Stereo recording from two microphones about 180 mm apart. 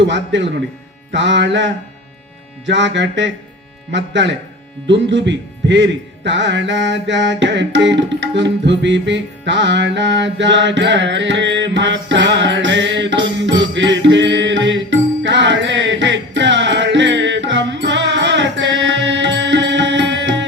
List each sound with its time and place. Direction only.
0.0 s speech: 85° right
8.4 s music: 80° right